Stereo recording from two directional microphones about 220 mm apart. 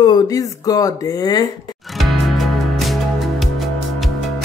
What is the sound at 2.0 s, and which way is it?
Music, centre (ahead or behind).